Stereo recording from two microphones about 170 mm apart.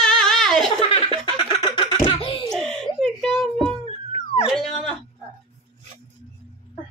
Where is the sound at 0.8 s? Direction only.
30° left (ahead or behind).